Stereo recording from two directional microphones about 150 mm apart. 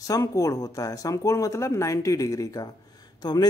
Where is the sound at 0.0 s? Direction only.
20° left (ahead or behind).